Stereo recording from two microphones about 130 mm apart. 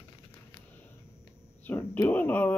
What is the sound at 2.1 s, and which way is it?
Speech, 15° left (ahead or behind).